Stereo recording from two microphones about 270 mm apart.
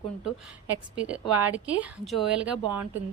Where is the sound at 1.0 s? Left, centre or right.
Centre.